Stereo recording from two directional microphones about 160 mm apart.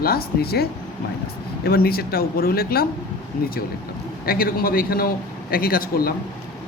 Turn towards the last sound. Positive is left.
turn(degrees=65)  # may be behind; listen again after turning